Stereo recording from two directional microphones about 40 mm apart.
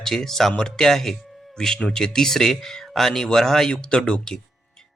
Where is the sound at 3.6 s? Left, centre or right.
Left.